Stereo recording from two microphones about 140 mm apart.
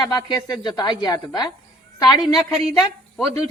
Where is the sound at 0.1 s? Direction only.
30° left (ahead or behind).